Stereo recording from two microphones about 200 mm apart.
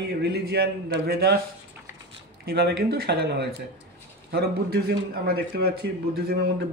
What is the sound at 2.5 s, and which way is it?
Speech, 55° right (ahead or behind).